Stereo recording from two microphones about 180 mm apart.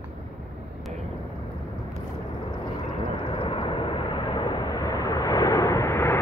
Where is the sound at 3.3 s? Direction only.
30° left (ahead or behind); by 6.1 s 15° left (ahead or behind).